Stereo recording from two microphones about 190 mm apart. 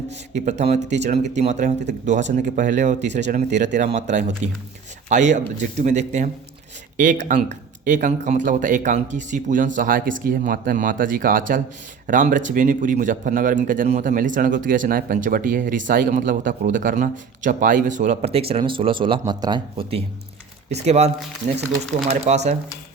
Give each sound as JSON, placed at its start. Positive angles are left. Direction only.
{"t": 0.3, "sound": "speech", "side_deg": -35}